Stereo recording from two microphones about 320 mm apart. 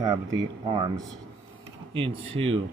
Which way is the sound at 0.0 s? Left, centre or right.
Centre.